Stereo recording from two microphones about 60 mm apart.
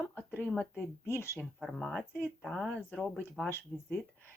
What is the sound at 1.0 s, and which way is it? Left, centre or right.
Speech, left.